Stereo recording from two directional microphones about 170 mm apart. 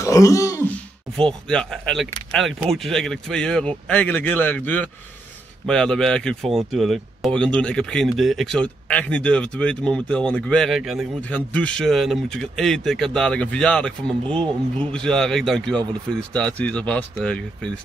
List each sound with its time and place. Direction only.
0.0 s throat clearing: 20° left (ahead or behind)
1.5 s speech: 5° left (ahead or behind)
14.2 s speech: 30° right (ahead or behind)
14.9 s speech: 5° left (ahead or behind)